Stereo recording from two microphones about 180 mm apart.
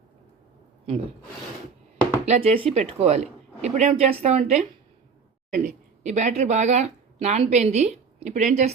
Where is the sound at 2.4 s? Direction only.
35° right (ahead or behind).